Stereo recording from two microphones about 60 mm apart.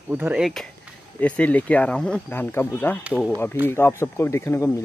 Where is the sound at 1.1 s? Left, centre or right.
Left.